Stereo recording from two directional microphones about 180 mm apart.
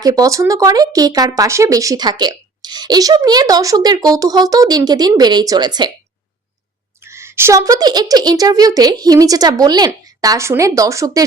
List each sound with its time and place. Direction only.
0.0 s speech: 20° right (ahead or behind)
7.0 s speech: 15° right (ahead or behind)